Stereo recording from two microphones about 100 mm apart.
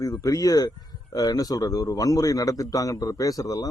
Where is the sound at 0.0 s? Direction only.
35° left (ahead or behind).